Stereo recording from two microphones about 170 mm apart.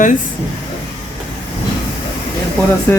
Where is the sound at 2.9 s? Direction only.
15° left (ahead or behind).